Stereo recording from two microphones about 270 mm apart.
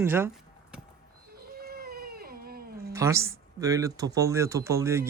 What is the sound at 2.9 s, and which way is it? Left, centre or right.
Speech, centre.